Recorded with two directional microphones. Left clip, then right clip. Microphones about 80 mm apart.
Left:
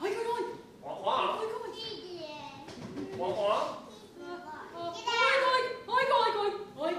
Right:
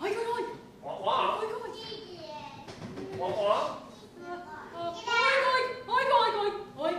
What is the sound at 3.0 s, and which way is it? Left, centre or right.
Music, left.